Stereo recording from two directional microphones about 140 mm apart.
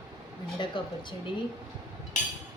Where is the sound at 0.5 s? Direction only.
35° left (ahead or behind).